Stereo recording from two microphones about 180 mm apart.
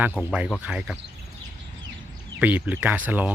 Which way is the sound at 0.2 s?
5° right (ahead or behind).